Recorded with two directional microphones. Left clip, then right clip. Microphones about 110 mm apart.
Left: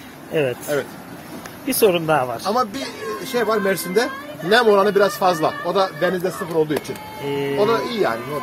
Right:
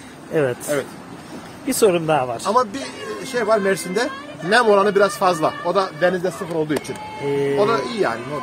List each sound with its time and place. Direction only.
1.7 s speech: 40° right (ahead or behind)
2.5 s speech: 15° right (ahead or behind)
7.2 s speech: 70° right (ahead or behind)
7.5 s speech: 20° right (ahead or behind)